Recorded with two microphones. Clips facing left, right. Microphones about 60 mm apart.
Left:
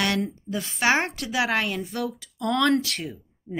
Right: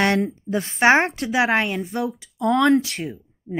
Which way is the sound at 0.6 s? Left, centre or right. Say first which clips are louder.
Right 6 dB; right.